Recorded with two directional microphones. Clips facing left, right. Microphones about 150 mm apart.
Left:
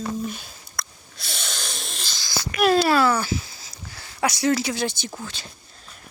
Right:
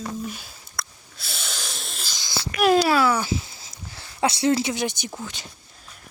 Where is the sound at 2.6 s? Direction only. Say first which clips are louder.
Even; 10° right (ahead or behind).